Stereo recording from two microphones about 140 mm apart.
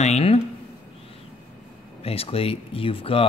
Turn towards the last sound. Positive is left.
turn(degrees=40)  # may be behind; listen again after turning